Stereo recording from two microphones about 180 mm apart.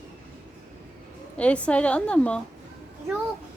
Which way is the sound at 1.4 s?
5° left (ahead or behind).